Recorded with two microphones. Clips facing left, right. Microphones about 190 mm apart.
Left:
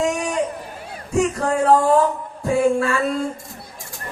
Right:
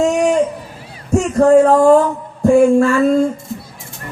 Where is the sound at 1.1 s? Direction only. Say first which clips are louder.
Right 10 dB; 45° right (ahead or behind).